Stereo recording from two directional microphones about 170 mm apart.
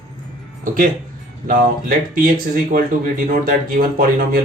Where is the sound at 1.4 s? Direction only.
55° right (ahead or behind).